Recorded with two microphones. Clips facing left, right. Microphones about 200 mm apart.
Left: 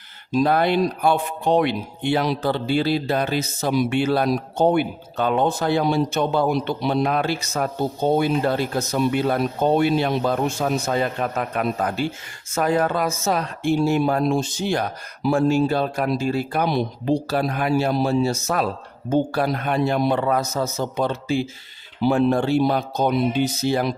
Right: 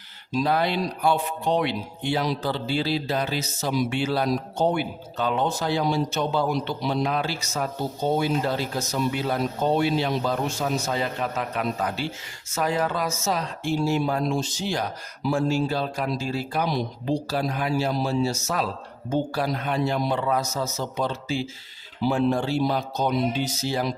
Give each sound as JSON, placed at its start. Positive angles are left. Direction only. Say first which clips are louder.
{"t": 0.3, "sound": "speech", "louder": "left 5 dB", "side_deg": 50}